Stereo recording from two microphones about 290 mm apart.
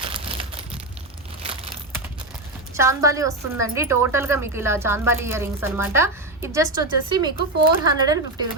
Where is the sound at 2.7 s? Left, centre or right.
Centre.